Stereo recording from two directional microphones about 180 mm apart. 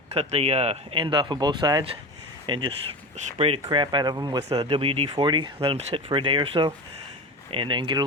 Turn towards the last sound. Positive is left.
turn(degrees=-25)  # may be behind; listen again after turning